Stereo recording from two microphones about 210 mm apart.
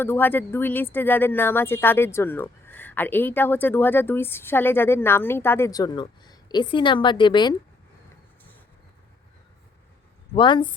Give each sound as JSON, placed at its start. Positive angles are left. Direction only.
{"t": 0.0, "sound": "speech", "side_deg": 10}
{"t": 10.3, "sound": "speech", "side_deg": 20}